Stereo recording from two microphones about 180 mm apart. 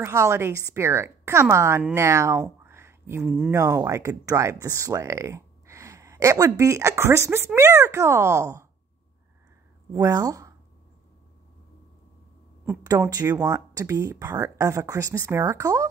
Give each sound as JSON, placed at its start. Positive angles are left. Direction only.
{"t": 0.0, "sound": "speech", "side_deg": -15}
{"t": 9.9, "sound": "speech", "side_deg": -20}
{"t": 12.6, "sound": "speech", "side_deg": -10}